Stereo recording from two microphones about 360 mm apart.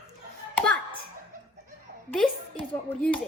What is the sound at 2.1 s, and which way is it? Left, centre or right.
A woman's voice, centre.